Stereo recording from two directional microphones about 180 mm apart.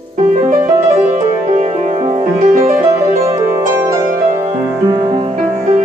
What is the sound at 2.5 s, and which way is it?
Music, 50° right (ahead or behind).